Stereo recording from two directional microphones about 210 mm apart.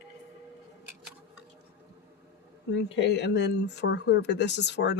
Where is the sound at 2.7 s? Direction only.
55° left (ahead or behind).